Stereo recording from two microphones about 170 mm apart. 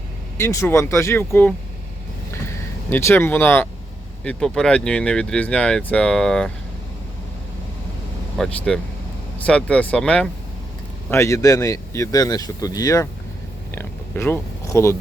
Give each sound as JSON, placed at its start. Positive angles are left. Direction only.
{"t": 0.4, "sound": "speech", "side_deg": 15}
{"t": 2.9, "sound": "speech", "side_deg": 15}
{"t": 8.4, "sound": "speech", "side_deg": 5}
{"t": 11.1, "sound": "speech", "side_deg": 15}
{"t": 13.7, "sound": "oink", "side_deg": 10}